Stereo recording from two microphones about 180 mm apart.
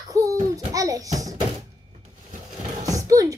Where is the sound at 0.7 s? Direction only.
20° right (ahead or behind).